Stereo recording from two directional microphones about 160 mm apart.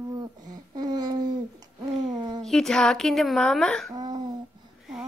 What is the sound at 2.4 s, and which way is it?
A woman's voice, 5° left (ahead or behind).